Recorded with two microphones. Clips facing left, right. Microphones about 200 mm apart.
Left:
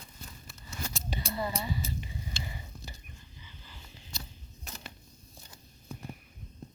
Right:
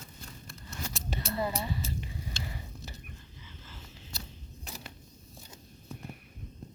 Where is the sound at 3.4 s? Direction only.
Centre (ahead or behind).